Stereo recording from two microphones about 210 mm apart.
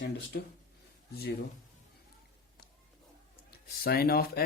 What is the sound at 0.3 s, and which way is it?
Speech, 50° left (ahead or behind).